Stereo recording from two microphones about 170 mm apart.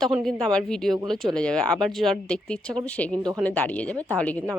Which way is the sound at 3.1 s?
25° right (ahead or behind).